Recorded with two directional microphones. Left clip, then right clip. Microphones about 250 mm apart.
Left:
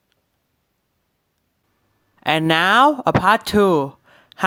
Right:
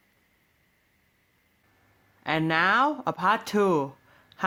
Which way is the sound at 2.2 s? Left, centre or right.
Left.